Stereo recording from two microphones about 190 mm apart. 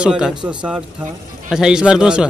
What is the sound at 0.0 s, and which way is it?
Speech, 5° right (ahead or behind).